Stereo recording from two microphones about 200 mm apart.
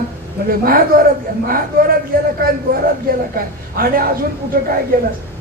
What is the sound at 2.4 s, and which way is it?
Speech, 45° right (ahead or behind).